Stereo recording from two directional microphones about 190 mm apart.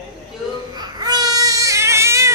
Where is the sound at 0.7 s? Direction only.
20° right (ahead or behind).